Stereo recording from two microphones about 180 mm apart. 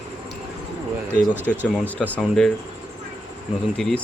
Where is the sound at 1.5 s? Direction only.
5° left (ahead or behind).